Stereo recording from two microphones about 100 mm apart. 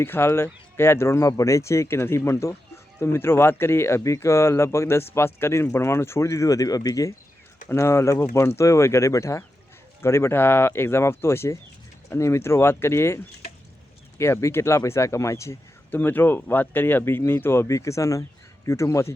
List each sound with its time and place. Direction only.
0.0 s speech: 25° left (ahead or behind)